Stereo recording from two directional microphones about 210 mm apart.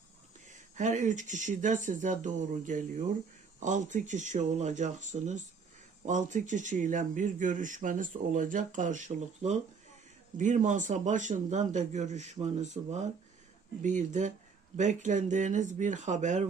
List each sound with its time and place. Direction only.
0.8 s speech: 35° right (ahead or behind)